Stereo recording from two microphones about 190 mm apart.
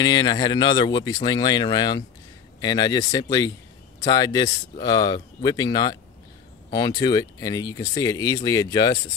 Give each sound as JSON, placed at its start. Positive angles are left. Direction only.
{"t": 0.0, "sound": "speech", "side_deg": 20}